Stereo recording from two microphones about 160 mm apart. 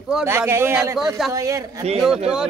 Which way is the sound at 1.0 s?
Centre (ahead or behind).